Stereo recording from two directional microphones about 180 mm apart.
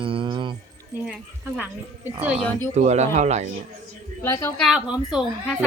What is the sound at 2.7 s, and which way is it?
Speech, 40° right (ahead or behind).